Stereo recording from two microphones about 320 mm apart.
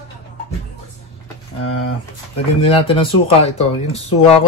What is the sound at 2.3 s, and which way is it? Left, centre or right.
Speech, centre.